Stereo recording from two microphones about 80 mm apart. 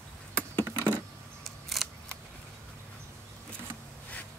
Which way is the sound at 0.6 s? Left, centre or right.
Right.